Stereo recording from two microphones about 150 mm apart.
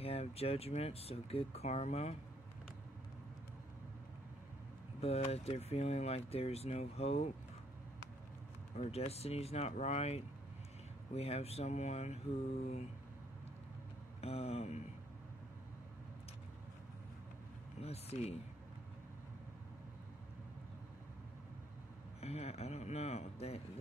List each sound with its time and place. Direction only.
0.0 s speech: 40° left (ahead or behind)
5.0 s speech: 45° left (ahead or behind)
8.7 s speech: 45° left (ahead or behind)
14.2 s speech: 40° left (ahead or behind)
17.8 s speech: 45° left (ahead or behind)
22.2 s speech: 45° left (ahead or behind)